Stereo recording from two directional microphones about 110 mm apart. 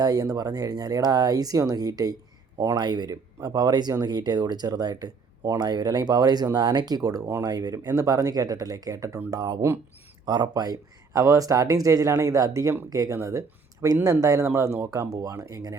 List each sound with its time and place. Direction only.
0.0 s speech: 35° right (ahead or behind)